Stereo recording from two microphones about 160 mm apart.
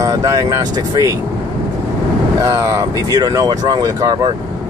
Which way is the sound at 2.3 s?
20° right (ahead or behind).